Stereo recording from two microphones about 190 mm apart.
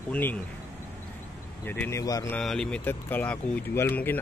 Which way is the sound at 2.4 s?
5° left (ahead or behind).